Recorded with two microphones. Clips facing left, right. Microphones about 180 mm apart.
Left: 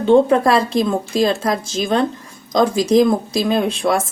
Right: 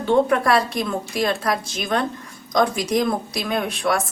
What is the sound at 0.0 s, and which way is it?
Speech, 25° left (ahead or behind).